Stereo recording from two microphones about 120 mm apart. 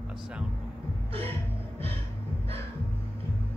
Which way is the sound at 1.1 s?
55° right (ahead or behind).